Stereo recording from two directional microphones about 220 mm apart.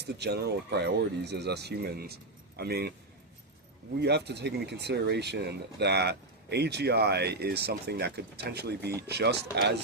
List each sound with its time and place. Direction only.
0.0 s speech: 50° right (ahead or behind)
4.0 s speech: 50° right (ahead or behind)